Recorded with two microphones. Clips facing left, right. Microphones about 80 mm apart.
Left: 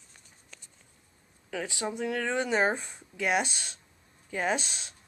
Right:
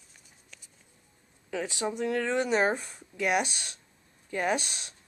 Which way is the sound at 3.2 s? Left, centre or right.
Centre.